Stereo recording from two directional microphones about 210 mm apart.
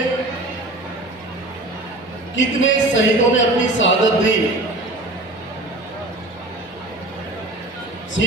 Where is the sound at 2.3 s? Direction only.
60° left (ahead or behind).